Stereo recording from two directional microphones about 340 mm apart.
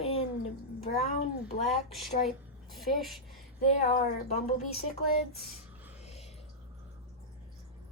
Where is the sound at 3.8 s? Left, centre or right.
Centre.